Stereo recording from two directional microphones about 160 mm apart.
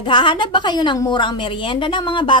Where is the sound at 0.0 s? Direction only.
30° left (ahead or behind).